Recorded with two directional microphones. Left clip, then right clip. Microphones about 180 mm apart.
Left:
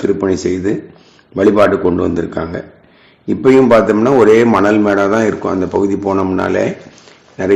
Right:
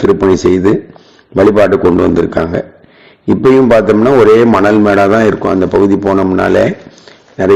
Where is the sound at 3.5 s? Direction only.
25° right (ahead or behind).